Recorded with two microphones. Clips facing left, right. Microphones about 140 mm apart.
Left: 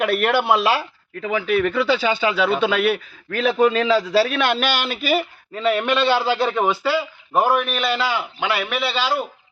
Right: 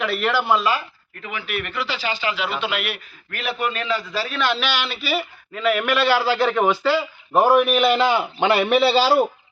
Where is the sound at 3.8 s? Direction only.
90° left; by 5.3 s 45° left (ahead or behind).